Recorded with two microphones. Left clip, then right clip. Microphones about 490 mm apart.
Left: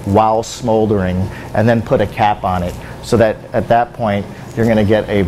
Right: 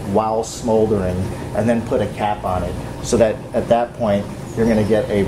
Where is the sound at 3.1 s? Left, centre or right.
Left.